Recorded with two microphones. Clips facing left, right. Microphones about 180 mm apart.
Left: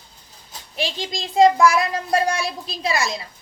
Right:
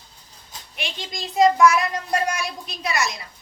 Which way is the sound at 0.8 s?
30° left (ahead or behind).